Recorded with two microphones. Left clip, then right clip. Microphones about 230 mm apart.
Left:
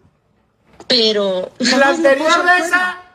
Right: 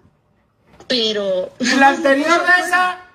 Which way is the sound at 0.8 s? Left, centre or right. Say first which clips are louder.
Left 4 dB; left.